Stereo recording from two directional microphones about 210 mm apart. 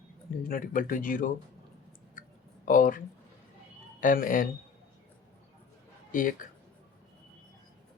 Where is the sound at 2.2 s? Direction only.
40° left (ahead or behind).